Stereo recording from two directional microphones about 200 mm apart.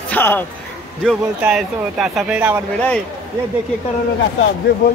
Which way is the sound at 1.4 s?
5° right (ahead or behind).